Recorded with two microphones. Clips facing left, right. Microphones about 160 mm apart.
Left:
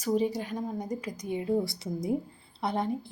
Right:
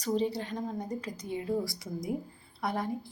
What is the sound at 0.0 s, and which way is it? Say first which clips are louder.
A woman's voice: left 2 dB; 10° left (ahead or behind).